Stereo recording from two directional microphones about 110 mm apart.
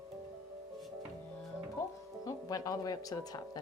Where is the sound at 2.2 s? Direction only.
30° left (ahead or behind).